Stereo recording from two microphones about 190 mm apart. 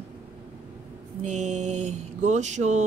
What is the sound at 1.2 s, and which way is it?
Speech, 40° right (ahead or behind).